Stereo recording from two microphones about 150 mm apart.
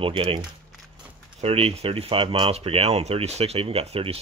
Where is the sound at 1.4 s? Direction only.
40° right (ahead or behind).